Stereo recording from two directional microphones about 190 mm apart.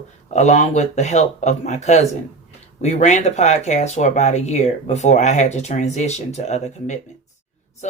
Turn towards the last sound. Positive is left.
turn(degrees=35)  # may be behind; listen again after turning